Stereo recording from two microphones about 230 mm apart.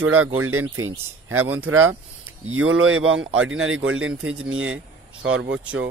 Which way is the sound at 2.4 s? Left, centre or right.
Right.